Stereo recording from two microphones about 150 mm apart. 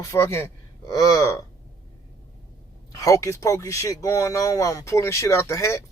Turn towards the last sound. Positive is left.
turn(degrees=20)  # may be behind; listen again after turning